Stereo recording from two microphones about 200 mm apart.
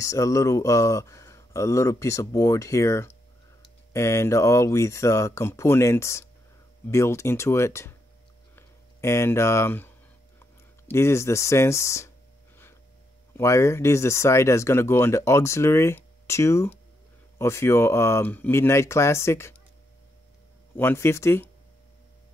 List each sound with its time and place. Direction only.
0.0 s speech: 15° left (ahead or behind)
13.3 s speech: 15° left (ahead or behind)
20.7 s speech: 10° left (ahead or behind)